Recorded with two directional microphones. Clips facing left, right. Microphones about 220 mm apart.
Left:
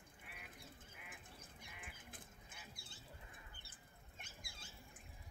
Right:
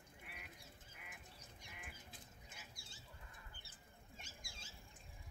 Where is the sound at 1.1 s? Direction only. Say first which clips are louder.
Left 2 dB; 55° left (ahead or behind).